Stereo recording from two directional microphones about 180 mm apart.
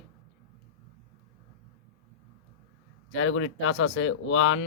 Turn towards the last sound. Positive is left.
turn(degrees=90)